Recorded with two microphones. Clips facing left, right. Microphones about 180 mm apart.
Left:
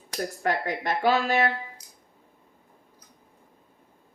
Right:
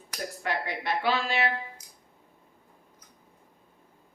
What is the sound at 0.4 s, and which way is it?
A woman's voice, 45° left (ahead or behind).